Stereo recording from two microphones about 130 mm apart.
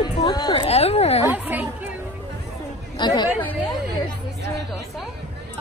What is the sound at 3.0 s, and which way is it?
Chatter, 35° left (ahead or behind).